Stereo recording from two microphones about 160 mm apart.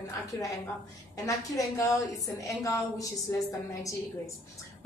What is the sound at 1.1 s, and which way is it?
A woman's voice, 20° left (ahead or behind).